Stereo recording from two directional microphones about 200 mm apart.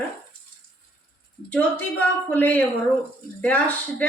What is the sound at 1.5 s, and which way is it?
Speech, 5° left (ahead or behind).